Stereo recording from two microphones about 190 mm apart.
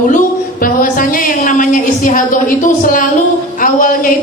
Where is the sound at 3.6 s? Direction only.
45° left (ahead or behind).